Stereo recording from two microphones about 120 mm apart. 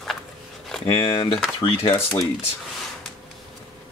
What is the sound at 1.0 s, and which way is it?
Speech, 40° left (ahead or behind).